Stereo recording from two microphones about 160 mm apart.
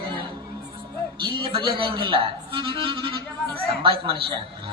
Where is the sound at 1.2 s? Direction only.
30° right (ahead or behind).